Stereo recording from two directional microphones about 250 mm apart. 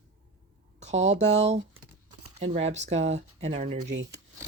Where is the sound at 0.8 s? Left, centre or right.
Right.